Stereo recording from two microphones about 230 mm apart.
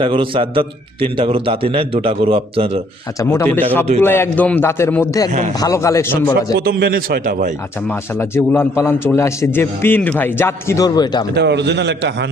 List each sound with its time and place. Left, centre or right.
0.0 s a man's voice: right
3.2 s a man's voice: centre
6.7 s a man's voice: right
7.9 s a man's voice: centre
11.3 s a man's voice: right